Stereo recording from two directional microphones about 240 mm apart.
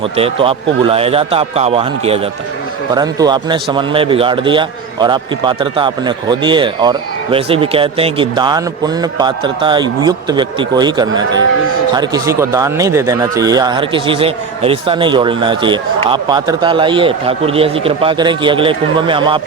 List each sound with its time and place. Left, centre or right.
0.0 s a man's voice: right